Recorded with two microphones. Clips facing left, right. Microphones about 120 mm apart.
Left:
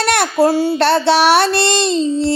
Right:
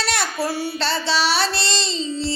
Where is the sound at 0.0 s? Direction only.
60° left (ahead or behind).